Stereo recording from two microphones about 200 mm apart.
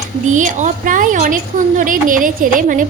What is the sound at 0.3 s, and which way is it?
A woman's voice, 40° right (ahead or behind).